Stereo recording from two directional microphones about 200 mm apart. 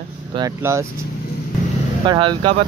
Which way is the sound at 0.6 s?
15° right (ahead or behind).